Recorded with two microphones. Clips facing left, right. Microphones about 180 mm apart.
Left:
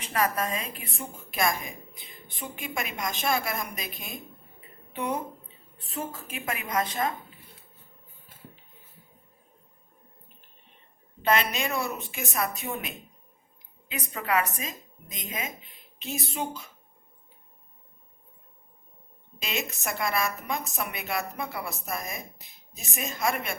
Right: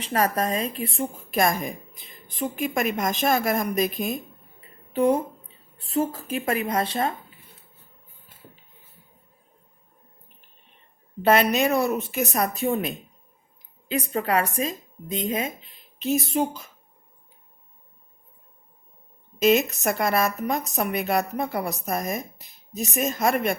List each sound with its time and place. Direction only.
0.0 s a woman's voice: 35° right (ahead or behind)
5.7 s a woman's voice: 35° right (ahead or behind)
11.2 s a woman's voice: 45° right (ahead or behind)
16.0 s speech: centre (ahead or behind)
16.3 s a woman's voice: 40° right (ahead or behind)
19.4 s a woman's voice: 45° right (ahead or behind)
22.7 s a woman's voice: centre (ahead or behind)
23.0 s a woman's voice: 40° right (ahead or behind)